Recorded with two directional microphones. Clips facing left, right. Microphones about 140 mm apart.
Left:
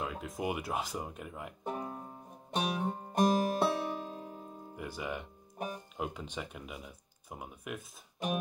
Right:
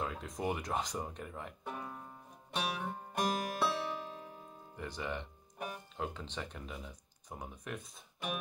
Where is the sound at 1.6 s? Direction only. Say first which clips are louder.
Left 9 dB; 35° left (ahead or behind).